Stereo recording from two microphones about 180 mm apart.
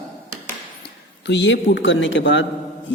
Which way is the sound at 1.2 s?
75° left (ahead or behind).